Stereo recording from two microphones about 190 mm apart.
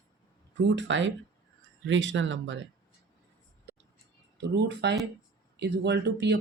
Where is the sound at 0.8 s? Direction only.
75° right (ahead or behind).